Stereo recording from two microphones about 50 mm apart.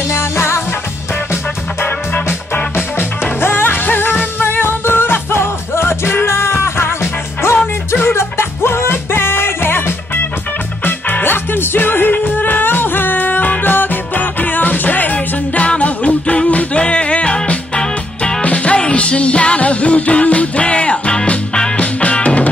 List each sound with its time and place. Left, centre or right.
0.1 s music: left
2.5 s music: left
6.3 s music: left